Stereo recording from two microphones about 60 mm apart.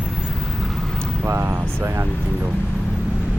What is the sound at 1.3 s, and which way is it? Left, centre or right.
Speech, right.